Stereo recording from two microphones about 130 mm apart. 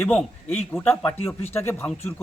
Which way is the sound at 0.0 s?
5° left (ahead or behind).